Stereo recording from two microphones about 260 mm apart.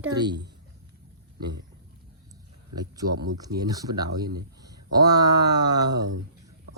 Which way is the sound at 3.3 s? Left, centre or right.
Centre.